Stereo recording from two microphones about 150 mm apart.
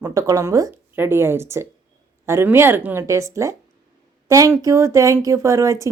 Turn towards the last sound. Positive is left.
turn(degrees=-20)  # may be behind; listen again after turning